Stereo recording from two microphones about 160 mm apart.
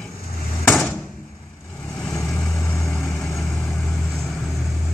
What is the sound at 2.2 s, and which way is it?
Vehicle, 20° left (ahead or behind).